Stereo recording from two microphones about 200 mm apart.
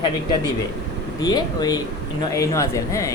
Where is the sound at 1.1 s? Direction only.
20° left (ahead or behind).